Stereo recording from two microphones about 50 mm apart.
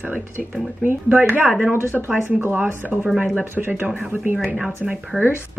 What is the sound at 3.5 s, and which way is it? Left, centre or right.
Speech, right.